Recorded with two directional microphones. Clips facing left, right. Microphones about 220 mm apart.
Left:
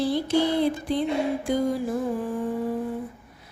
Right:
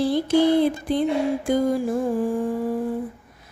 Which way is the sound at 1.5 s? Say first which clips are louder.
Right 4 dB; 45° right (ahead or behind).